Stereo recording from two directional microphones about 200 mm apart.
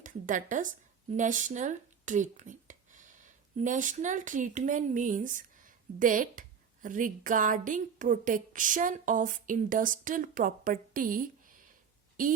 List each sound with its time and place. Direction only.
0.0 s a woman's voice: 40° right (ahead or behind)